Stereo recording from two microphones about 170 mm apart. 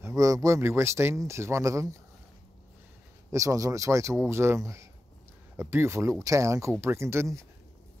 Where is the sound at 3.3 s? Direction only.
20° right (ahead or behind).